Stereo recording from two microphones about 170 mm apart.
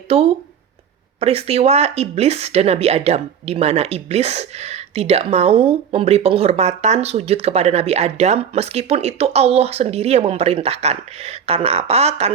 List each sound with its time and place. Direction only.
0.1 s speech: 35° right (ahead or behind)